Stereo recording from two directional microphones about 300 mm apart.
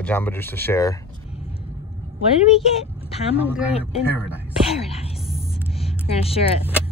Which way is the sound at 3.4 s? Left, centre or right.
Centre.